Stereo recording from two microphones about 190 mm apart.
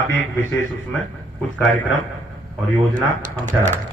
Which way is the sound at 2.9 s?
40° right (ahead or behind).